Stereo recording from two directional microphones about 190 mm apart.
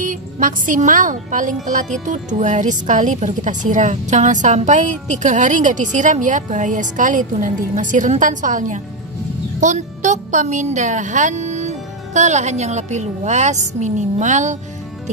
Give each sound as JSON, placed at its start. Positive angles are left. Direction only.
{"t": 0.0, "sound": "speech", "side_deg": -45}